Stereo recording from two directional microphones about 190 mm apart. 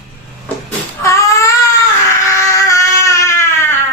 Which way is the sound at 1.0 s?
15° left (ahead or behind).